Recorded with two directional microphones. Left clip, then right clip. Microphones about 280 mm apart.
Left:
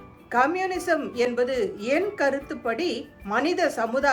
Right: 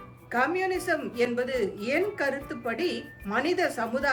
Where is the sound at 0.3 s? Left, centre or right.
Centre.